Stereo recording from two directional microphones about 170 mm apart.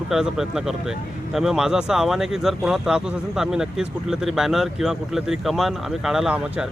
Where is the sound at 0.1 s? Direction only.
5° right (ahead or behind).